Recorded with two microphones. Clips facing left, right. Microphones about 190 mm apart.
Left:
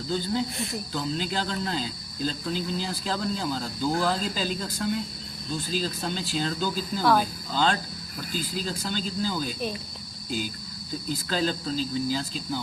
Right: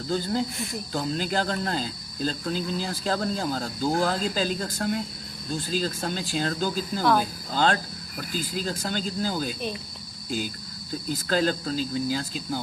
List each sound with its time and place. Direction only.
0.9 s cricket: 45° right (ahead or behind)
7.0 s speech: 5° left (ahead or behind)
7.5 s cricket: 45° right (ahead or behind)
11.1 s cricket: 45° right (ahead or behind)